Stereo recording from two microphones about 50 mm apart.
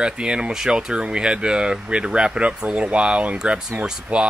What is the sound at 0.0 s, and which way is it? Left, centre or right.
Speech, centre.